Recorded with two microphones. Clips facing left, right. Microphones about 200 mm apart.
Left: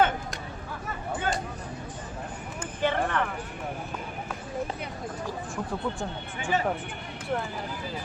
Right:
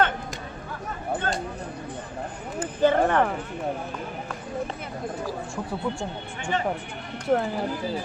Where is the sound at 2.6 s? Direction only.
40° right (ahead or behind).